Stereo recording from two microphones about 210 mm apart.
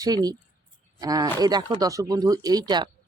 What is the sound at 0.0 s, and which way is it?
Speech, 20° right (ahead or behind).